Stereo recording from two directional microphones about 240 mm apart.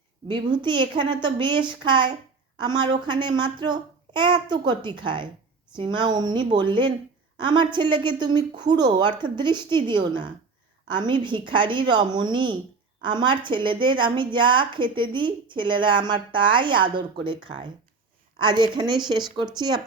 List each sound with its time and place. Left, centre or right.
0.3 s a woman's voice: centre
18.3 s a woman's voice: centre